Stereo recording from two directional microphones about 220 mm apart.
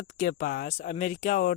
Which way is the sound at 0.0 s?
35° left (ahead or behind).